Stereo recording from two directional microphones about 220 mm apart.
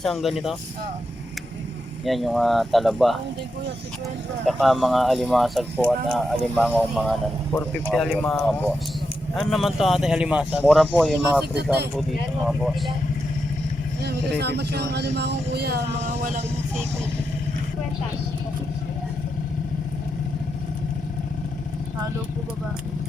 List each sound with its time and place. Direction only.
0.0 s speech: centre (ahead or behind)
2.0 s speech: centre (ahead or behind)
4.4 s speech: centre (ahead or behind)
11.5 s speech: 50° right (ahead or behind)
11.9 s speech: centre (ahead or behind)
14.0 s speech: 50° right (ahead or behind)